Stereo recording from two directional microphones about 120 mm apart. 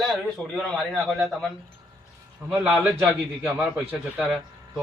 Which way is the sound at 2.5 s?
5° right (ahead or behind).